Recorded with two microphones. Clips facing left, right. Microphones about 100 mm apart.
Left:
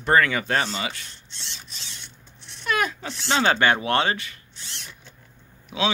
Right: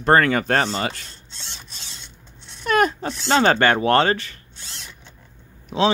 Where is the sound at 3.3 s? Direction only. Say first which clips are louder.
Right 4 dB; 45° right (ahead or behind).